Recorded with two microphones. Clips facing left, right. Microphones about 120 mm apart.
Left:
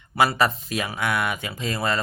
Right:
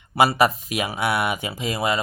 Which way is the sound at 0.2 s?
15° right (ahead or behind).